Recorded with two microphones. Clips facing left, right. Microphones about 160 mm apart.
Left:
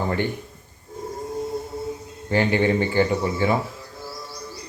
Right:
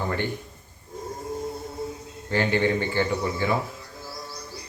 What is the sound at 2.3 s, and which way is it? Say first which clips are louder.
Speech: left 3 dB; 15° left (ahead or behind).